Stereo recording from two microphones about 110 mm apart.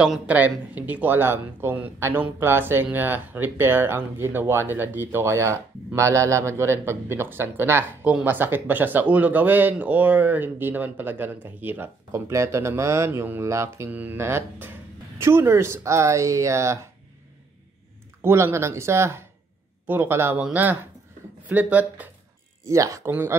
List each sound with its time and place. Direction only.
0.0 s speech: 10° right (ahead or behind)
18.2 s speech: 25° right (ahead or behind)
21.5 s speech: 15° right (ahead or behind)
22.7 s speech: 30° right (ahead or behind)